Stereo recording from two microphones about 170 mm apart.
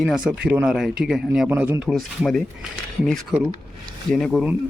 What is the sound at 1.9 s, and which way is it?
Speech, 5° left (ahead or behind).